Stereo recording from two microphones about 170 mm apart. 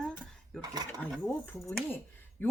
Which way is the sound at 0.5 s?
25° right (ahead or behind).